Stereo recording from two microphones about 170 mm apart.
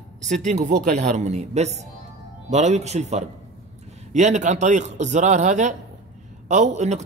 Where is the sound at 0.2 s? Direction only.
45° right (ahead or behind).